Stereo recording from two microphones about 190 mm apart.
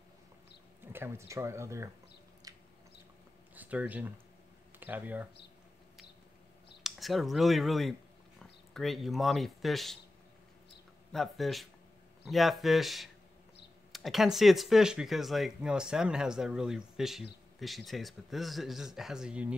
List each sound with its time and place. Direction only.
0.9 s speech: 15° right (ahead or behind)
2.4 s a sound: 20° right (ahead or behind)
3.5 s speech: 10° right (ahead or behind)
6.8 s speech: centre (ahead or behind)
11.1 s speech: centre (ahead or behind)